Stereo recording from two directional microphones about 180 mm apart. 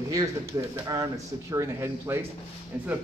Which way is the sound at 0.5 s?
20° right (ahead or behind).